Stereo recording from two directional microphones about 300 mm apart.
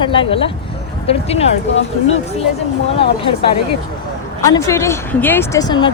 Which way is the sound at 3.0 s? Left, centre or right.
Centre.